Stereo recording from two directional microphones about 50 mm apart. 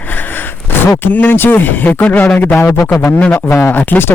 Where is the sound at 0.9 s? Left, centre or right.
Left.